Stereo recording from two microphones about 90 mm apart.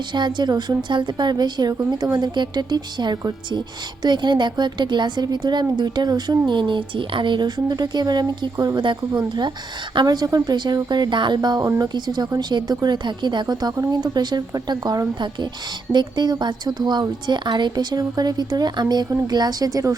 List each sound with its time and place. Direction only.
0.1 s a woman's voice: 55° right (ahead or behind)
8.8 s a woman's voice: 60° right (ahead or behind); by 20.0 s 40° right (ahead or behind)